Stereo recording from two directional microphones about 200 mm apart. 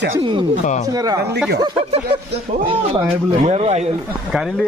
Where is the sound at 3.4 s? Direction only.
30° right (ahead or behind).